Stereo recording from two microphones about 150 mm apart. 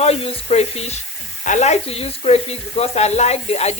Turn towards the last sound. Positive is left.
turn(degrees=45)  # may be behind; listen again after turning